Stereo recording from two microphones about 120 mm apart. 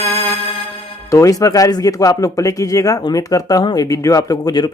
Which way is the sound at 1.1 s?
25° left (ahead or behind).